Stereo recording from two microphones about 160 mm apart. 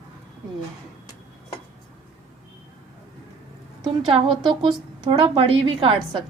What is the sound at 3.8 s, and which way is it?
A woman's voice, 35° right (ahead or behind).